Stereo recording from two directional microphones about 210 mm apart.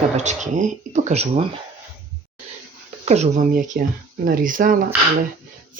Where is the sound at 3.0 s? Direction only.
30° right (ahead or behind).